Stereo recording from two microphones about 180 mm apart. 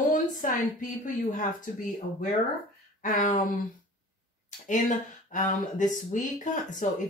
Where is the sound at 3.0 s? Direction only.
50° left (ahead or behind).